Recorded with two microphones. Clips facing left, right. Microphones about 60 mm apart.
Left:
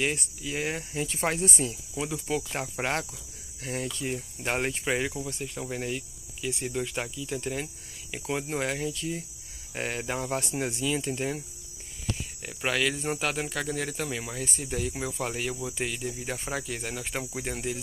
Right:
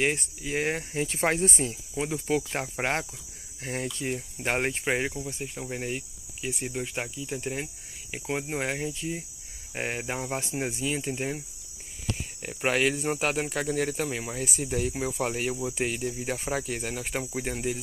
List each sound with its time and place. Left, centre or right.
0.0 s speech: right
5.6 s speech: centre
5.9 s cricket: right
6.7 s speech: centre
12.4 s speech: right
13.0 s speech: centre